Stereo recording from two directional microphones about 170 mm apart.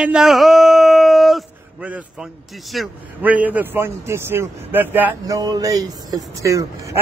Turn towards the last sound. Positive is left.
turn(degrees=-20)  # may be behind; listen again after turning